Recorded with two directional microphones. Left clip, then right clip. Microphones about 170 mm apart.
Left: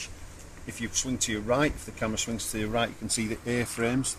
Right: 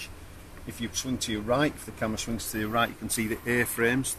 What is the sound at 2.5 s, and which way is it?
Speech, 45° left (ahead or behind).